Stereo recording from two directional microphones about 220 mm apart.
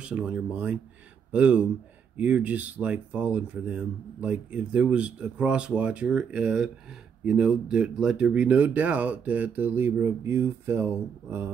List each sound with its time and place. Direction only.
0.0 s speech: 5° right (ahead or behind)